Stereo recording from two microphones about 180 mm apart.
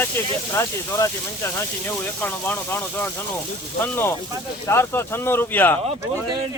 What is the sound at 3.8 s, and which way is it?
Speech, 15° left (ahead or behind).